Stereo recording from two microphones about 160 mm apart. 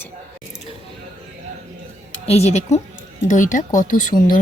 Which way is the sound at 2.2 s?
40° left (ahead or behind).